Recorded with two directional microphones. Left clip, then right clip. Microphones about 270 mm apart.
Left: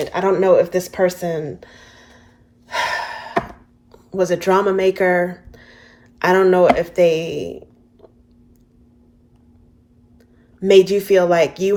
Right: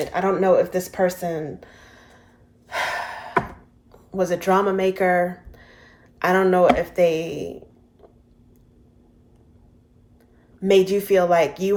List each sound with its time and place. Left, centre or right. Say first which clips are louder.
0.0 s speech: left 4 dB; left
2.6 s gasp: left 4 dB; left
3.9 s speech: left 4 dB; left
10.6 s speech: left 5 dB; left